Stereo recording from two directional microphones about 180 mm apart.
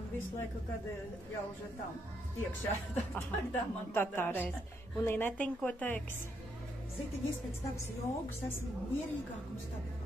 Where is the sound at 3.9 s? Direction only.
10° left (ahead or behind).